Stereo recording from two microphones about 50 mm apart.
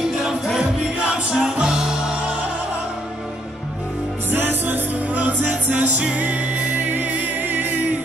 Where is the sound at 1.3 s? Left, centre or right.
Centre.